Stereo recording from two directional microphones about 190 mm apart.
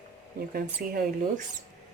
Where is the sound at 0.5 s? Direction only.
50° right (ahead or behind).